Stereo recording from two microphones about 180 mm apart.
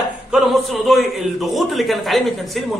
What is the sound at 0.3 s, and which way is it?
A man's voice, centre (ahead or behind).